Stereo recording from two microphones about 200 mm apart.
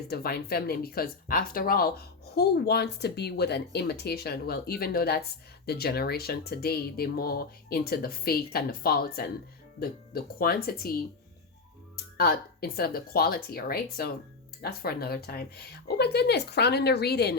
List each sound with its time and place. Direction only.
0.1 s speech: 50° left (ahead or behind)
12.1 s a woman's voice: 50° left (ahead or behind)